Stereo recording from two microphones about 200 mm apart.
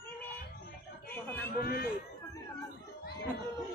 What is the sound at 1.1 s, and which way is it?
Chatter, 10° left (ahead or behind).